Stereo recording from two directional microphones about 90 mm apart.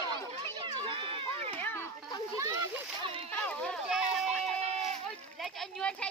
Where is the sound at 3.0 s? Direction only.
70° right (ahead or behind).